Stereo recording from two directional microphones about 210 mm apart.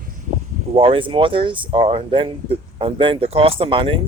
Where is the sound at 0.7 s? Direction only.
25° right (ahead or behind).